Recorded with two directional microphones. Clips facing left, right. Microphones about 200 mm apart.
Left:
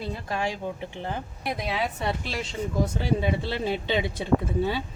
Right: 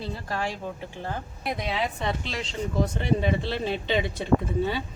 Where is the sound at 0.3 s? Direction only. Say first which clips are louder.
Left 2 dB; 15° left (ahead or behind).